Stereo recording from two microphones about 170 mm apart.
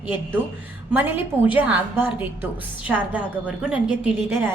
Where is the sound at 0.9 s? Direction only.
10° right (ahead or behind).